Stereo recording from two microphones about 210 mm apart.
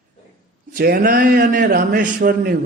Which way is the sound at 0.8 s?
45° right (ahead or behind).